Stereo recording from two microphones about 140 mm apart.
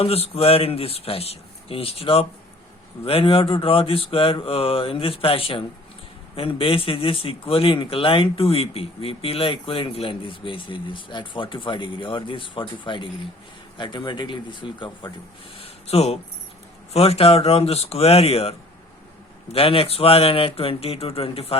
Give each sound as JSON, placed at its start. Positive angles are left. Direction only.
{"t": 0.0, "sound": "speech", "side_deg": 45}
{"t": 15.5, "sound": "a sound", "side_deg": 45}
{"t": 16.9, "sound": "speech", "side_deg": 45}
{"t": 19.5, "sound": "speech", "side_deg": 40}